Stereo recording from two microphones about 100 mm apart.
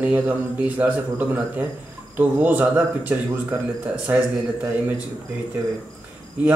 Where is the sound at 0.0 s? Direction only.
15° right (ahead or behind).